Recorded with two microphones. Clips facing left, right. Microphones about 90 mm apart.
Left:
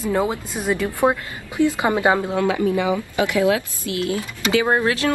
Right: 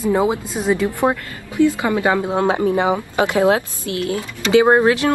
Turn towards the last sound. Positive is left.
turn(degrees=-20)  # may be behind; listen again after turning